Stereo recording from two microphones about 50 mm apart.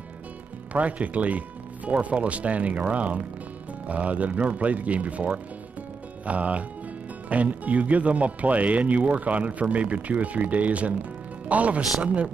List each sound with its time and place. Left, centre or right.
0.7 s speech: right